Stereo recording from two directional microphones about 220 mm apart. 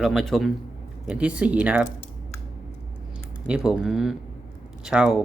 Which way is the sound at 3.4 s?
5° right (ahead or behind).